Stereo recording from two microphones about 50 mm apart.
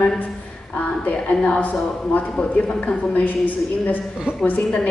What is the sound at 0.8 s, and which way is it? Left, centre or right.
A woman's voice, left.